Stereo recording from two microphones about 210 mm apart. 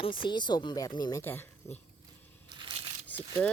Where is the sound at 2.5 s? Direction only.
25° right (ahead or behind).